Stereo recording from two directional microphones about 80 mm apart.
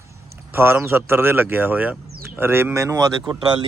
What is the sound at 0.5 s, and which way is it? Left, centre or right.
Speech, right.